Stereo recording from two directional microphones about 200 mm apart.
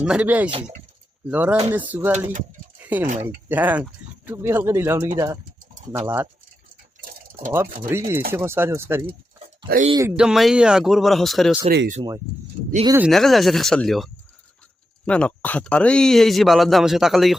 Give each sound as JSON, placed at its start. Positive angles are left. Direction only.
{"t": 0.0, "sound": "speech", "side_deg": -5}
{"t": 2.7, "sound": "bird", "side_deg": -10}
{"t": 3.2, "sound": "speech", "side_deg": -10}
{"t": 7.0, "sound": "typing", "side_deg": -45}
{"t": 7.9, "sound": "speech", "side_deg": -10}
{"t": 9.6, "sound": "speech", "side_deg": -45}
{"t": 9.9, "sound": "speech", "side_deg": -15}
{"t": 10.2, "sound": "a man's voice", "side_deg": 0}
{"t": 13.0, "sound": "a man's voice", "side_deg": 0}